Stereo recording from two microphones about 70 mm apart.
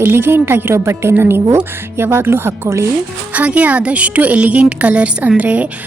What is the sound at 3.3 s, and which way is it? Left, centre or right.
A woman's voice, right.